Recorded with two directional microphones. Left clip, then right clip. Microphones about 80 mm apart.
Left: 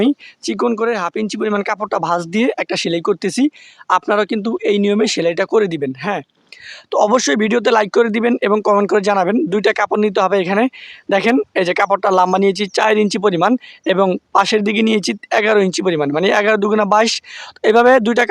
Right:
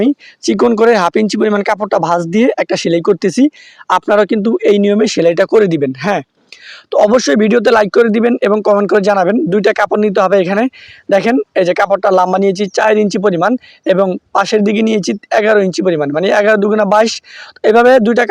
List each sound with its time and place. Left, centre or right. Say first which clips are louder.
0.4 s speech: right 7 dB; right
0.8 s speech: right 9 dB; right
1.4 s speech: right 2 dB; right
1.8 s speech: right 5 dB; right
5.9 s speech: right 6 dB; right
6.9 s speech: right 4 dB; centre
7.9 s speech: right 4 dB; centre
8.1 s speech: right 4 dB; right
11.1 s speech: right 3 dB; centre
16.1 s speech: right 4 dB; centre